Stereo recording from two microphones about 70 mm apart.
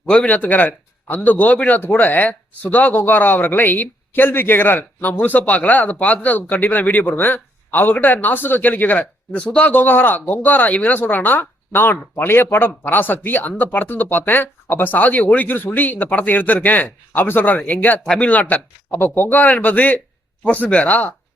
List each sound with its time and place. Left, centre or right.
0.0 s speech: centre
18.9 s speech: left